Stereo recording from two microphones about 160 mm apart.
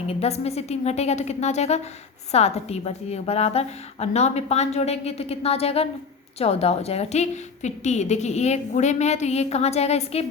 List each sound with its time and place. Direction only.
0.1 s a woman's voice: 40° left (ahead or behind)